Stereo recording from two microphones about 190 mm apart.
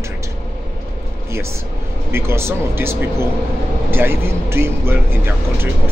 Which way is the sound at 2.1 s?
15° right (ahead or behind).